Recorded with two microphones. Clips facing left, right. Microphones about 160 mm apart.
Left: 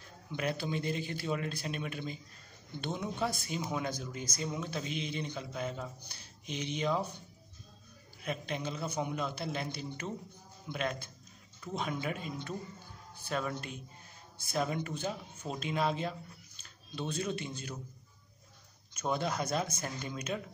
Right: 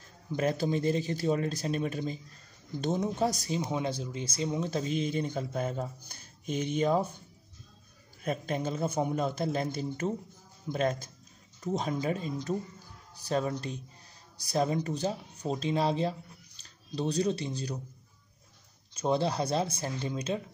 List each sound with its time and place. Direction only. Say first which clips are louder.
0.3 s speech: right 6 dB; 40° right (ahead or behind)
4.6 s a man's voice: right 7 dB; 40° right (ahead or behind)
8.2 s a man's voice: right 5 dB; 45° right (ahead or behind)
18.9 s speech: right 5 dB; 30° right (ahead or behind)